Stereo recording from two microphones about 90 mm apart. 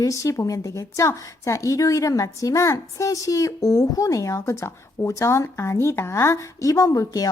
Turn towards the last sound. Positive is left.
turn(degrees=40)  # may be behind; listen again after turning